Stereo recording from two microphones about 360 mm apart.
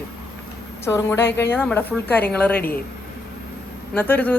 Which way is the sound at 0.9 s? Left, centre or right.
Centre.